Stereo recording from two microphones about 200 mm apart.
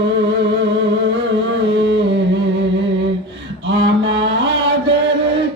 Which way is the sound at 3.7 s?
65° right (ahead or behind).